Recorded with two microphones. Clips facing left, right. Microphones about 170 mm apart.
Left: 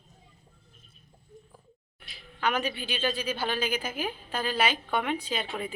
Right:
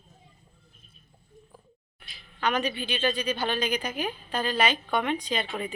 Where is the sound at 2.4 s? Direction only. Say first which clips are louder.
Right 2 dB; 10° left (ahead or behind).